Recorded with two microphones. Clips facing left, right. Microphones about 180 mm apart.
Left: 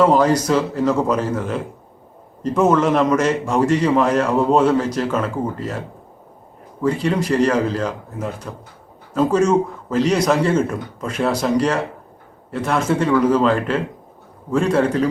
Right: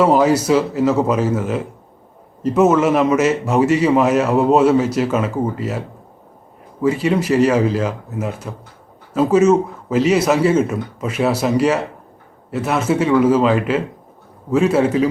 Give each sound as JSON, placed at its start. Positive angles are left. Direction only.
{"t": 0.0, "sound": "a man's voice", "side_deg": -10}
{"t": 6.8, "sound": "a man's voice", "side_deg": -5}